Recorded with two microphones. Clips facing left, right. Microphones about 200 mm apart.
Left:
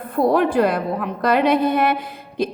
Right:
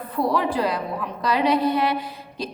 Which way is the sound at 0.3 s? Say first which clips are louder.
Left 7 dB; 50° left (ahead or behind).